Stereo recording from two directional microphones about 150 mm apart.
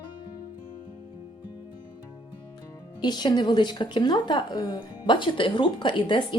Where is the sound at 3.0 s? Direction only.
30° left (ahead or behind).